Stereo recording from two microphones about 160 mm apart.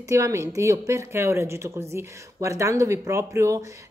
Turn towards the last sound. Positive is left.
turn(degrees=-20)  # may be behind; listen again after turning